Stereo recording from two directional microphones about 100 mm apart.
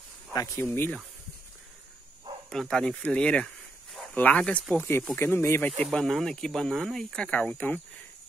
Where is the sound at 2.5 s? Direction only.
5° left (ahead or behind).